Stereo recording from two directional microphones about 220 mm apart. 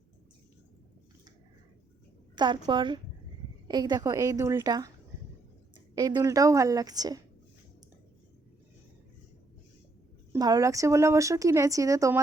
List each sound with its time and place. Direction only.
2.3 s a woman's voice: 20° right (ahead or behind)
5.9 s speech: 20° right (ahead or behind)
10.3 s speech: 15° right (ahead or behind)